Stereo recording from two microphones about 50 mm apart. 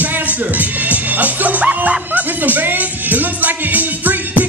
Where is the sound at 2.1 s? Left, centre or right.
Right.